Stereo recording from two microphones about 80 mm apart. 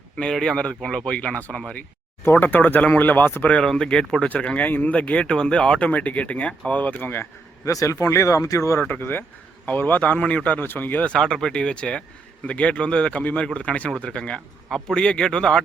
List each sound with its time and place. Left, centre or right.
0.2 s speech: centre
2.2 s speech: left
7.6 s speech: left
8.9 s speech: left